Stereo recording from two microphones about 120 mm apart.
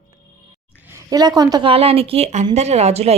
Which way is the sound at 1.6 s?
55° right (ahead or behind).